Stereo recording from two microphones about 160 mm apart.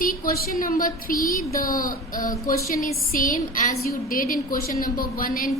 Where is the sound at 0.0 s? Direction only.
65° left (ahead or behind).